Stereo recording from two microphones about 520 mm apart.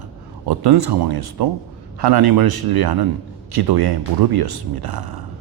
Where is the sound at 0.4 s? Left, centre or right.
Right.